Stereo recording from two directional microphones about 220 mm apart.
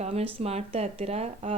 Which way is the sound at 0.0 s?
30° right (ahead or behind).